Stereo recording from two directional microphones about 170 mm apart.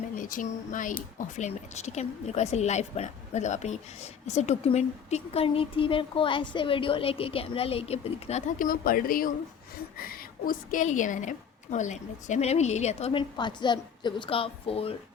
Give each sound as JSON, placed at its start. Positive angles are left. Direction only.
{"t": 0.2, "sound": "speech", "side_deg": 50}